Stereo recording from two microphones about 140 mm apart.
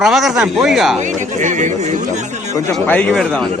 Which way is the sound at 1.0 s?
60° right (ahead or behind).